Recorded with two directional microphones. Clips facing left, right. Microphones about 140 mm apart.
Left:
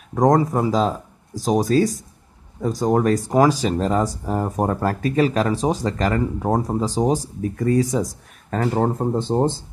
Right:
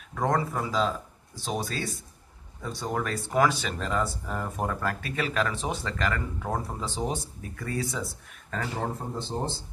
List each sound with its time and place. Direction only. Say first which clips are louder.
0.1 s speech: left 10 dB; 40° left (ahead or behind)
8.5 s speech: left 11 dB; 50° left (ahead or behind)